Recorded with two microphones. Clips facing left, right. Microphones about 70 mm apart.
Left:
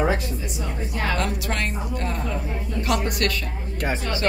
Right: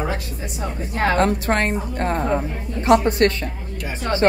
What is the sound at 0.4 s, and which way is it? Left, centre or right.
A woman's voice, right.